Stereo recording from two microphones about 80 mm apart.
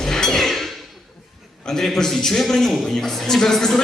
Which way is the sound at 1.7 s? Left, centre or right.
Centre.